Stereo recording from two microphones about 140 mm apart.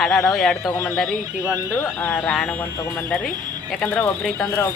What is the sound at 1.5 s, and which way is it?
Speech, 20° left (ahead or behind).